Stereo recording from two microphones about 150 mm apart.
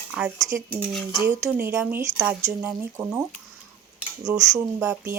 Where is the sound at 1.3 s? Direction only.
20° right (ahead or behind).